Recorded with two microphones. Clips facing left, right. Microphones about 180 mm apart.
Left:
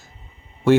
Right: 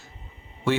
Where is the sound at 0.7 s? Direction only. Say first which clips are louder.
Left 9 dB; 40° left (ahead or behind).